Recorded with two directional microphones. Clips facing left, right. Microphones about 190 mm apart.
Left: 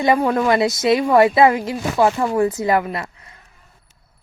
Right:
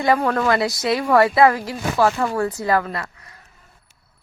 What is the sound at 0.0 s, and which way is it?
A woman's voice, 15° left (ahead or behind).